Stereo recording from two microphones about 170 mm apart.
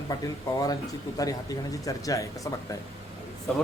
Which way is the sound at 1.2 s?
20° left (ahead or behind).